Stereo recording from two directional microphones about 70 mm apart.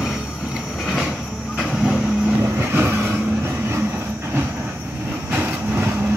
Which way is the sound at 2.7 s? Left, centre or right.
Right.